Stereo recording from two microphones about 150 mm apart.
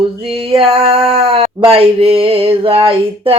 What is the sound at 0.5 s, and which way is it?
Male singing, 40° right (ahead or behind).